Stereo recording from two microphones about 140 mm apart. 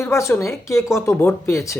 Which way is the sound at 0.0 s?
20° left (ahead or behind).